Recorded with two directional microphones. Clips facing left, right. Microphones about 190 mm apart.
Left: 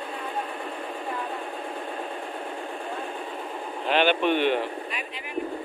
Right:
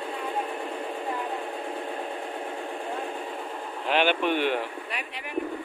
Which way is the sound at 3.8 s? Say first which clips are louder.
Left 2 dB; 10° right (ahead or behind).